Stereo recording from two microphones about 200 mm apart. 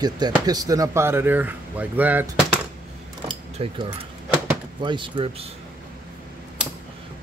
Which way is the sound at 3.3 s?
25° right (ahead or behind).